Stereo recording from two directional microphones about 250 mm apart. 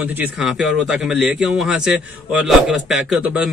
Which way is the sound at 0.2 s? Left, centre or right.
Centre.